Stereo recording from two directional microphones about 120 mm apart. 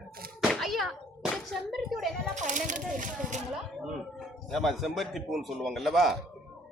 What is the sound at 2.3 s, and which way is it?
Speech, 90° right.